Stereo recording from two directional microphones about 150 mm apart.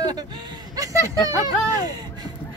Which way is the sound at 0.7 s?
20° right (ahead or behind).